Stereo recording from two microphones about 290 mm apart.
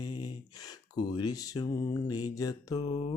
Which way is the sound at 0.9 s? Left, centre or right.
Centre.